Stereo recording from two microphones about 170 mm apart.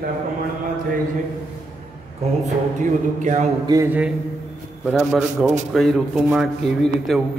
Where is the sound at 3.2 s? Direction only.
45° right (ahead or behind).